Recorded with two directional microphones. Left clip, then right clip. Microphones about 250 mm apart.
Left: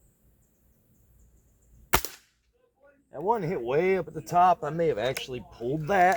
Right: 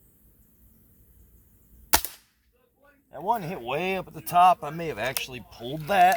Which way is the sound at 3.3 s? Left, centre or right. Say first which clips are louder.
Left 1 dB; right.